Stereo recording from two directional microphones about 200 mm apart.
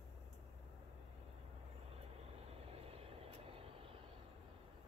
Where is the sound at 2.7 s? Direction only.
30° right (ahead or behind).